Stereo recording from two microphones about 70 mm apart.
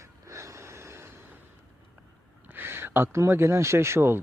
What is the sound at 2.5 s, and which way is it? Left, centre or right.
Speech, right.